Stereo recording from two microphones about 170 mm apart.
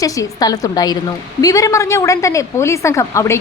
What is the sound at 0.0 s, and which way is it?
A woman's voice, 20° left (ahead or behind).